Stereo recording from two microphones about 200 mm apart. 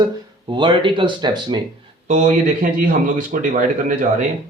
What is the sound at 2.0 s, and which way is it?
A man's voice, 40° right (ahead or behind).